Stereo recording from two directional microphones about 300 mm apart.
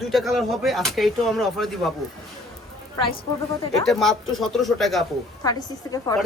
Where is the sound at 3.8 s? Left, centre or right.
Centre.